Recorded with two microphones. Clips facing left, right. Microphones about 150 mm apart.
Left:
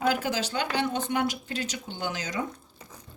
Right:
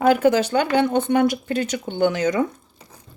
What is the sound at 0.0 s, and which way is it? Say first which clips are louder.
Speech: right 11 dB; 55° right (ahead or behind).